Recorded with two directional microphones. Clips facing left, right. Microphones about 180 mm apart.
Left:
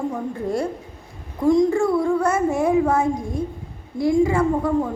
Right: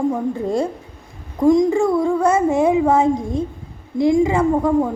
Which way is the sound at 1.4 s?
15° right (ahead or behind).